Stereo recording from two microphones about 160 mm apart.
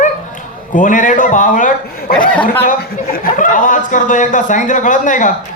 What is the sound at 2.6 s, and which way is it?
A man's voice, 65° left (ahead or behind).